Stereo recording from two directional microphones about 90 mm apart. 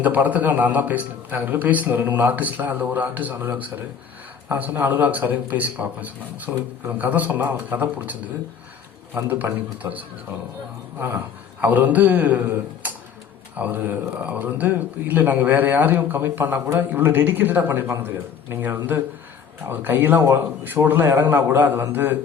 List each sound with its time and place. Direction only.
0.0 s a man's voice: 20° right (ahead or behind)
11.6 s a man's voice: 20° right (ahead or behind)
12.8 s tick-tock: 20° right (ahead or behind)
13.6 s a man's voice: 20° right (ahead or behind)